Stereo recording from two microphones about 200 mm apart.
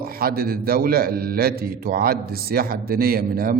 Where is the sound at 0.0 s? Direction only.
50° right (ahead or behind).